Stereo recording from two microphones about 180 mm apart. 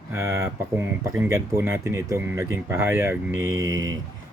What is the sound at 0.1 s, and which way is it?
Speech, 15° right (ahead or behind).